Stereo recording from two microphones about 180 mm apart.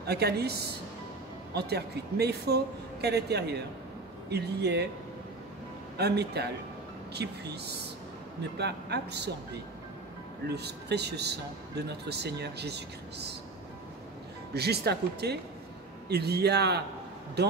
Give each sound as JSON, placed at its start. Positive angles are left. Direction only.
{"t": 0.0, "sound": "a man's voice", "side_deg": -65}
{"t": 5.9, "sound": "a man's voice", "side_deg": -65}
{"t": 10.4, "sound": "speech", "side_deg": -65}
{"t": 14.5, "sound": "a man's voice", "side_deg": -65}